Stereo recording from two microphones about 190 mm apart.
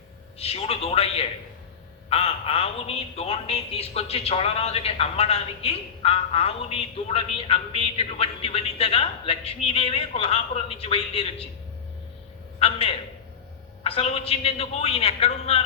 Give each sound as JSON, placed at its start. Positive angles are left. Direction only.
{"t": 0.3, "sound": "a man's voice", "side_deg": 30}
{"t": 12.5, "sound": "a man's voice", "side_deg": 30}